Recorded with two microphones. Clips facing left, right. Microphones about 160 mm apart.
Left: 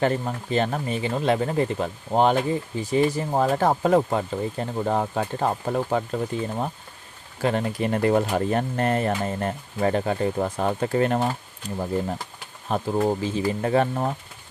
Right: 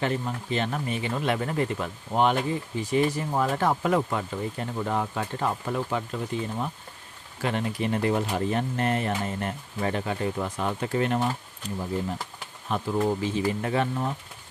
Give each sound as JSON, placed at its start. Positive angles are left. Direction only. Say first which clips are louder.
{"t": 0.0, "sound": "speech", "louder": "left 4 dB", "side_deg": 40}
{"t": 12.6, "sound": "speech", "louder": "left 3 dB", "side_deg": 35}